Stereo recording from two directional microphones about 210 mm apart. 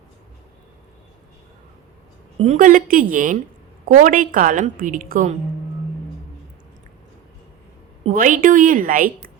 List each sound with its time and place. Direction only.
2.4 s a woman's voice: 35° right (ahead or behind)
8.0 s a woman's voice: 40° right (ahead or behind)